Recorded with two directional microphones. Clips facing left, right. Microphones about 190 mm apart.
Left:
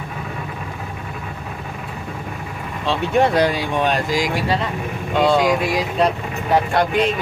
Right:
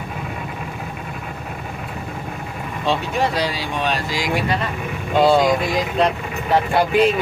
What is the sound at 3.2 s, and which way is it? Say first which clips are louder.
Speech: left 5 dB; 55° left (ahead or behind).